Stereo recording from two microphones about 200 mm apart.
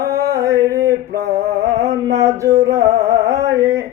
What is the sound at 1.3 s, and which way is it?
Music, 15° right (ahead or behind).